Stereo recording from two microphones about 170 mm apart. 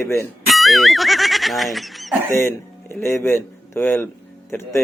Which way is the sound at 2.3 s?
15° left (ahead or behind).